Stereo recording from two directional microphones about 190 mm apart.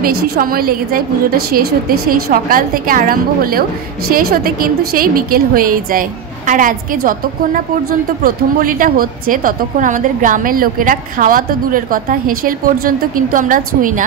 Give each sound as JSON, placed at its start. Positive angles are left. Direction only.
{"t": 0.0, "sound": "a woman's voice", "side_deg": -50}
{"t": 2.0, "sound": "a woman's voice", "side_deg": -50}
{"t": 8.2, "sound": "a woman's voice", "side_deg": -50}